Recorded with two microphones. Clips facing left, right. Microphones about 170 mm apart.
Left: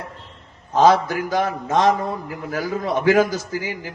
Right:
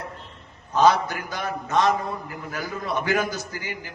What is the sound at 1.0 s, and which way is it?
Speech, 90° left.